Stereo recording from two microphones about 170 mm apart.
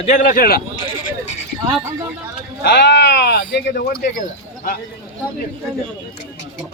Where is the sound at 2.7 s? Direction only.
90° left; by 3.9 s 75° left (ahead or behind).